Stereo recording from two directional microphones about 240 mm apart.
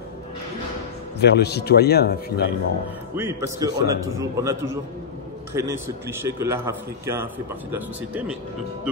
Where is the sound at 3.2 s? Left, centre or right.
Centre.